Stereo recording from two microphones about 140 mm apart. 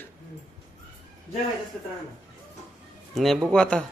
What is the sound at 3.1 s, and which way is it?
Speech, centre (ahead or behind).